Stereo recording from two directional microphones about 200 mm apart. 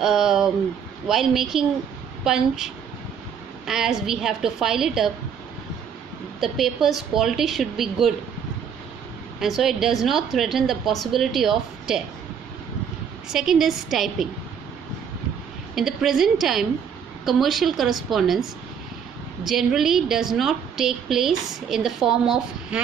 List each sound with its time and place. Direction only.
0.0 s a woman's voice: centre (ahead or behind)
6.4 s a woman's voice: centre (ahead or behind)
9.4 s a woman's voice: centre (ahead or behind)
13.3 s a woman's voice: centre (ahead or behind)
15.7 s a woman's voice: centre (ahead or behind)